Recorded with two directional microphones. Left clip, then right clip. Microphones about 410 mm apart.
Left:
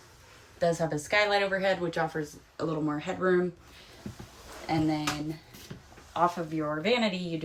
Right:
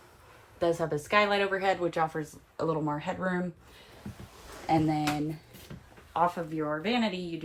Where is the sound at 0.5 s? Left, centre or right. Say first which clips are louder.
Left 1 dB; centre.